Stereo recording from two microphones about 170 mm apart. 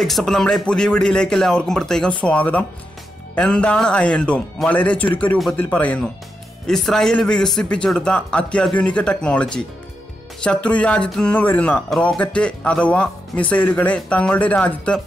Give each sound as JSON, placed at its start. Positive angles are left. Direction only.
{"t": 0.0, "sound": "speech", "side_deg": 0}